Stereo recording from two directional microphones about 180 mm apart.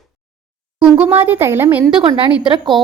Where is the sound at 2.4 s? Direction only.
25° right (ahead or behind).